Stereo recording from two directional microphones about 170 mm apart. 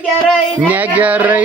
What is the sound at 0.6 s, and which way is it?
Speech, 10° right (ahead or behind).